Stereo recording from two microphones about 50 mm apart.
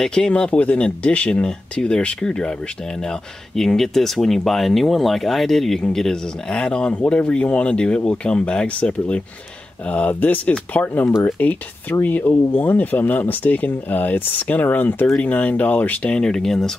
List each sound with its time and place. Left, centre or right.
0.0 s speech: centre; by 16.1 s left
16.1 s speech: centre